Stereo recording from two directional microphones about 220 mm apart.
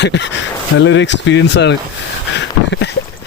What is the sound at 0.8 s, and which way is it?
Speech, 55° left (ahead or behind).